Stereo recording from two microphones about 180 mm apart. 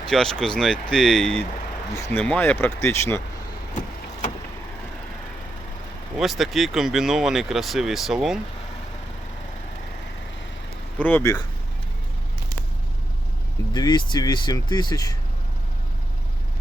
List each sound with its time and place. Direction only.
0.1 s speech: 5° left (ahead or behind)
6.1 s speech: centre (ahead or behind)
10.9 s speech: 10° left (ahead or behind)
13.7 s speech: 25° left (ahead or behind)